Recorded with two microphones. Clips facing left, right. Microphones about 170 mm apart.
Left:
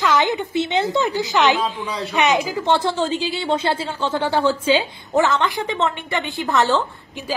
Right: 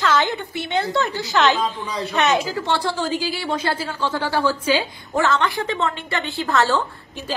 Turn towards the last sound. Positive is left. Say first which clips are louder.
# left 2 dB
turn(degrees=20)  # may be behind; listen again after turning